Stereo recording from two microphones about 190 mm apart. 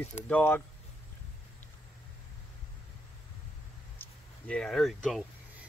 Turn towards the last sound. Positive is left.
turn(degrees=0)  # may be behind; listen again after turning